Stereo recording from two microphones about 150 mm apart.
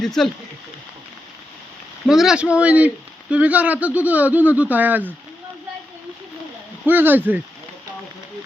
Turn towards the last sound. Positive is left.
turn(degrees=-10)  # may be behind; listen again after turning